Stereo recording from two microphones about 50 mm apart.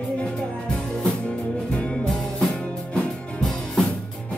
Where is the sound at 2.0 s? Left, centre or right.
Centre.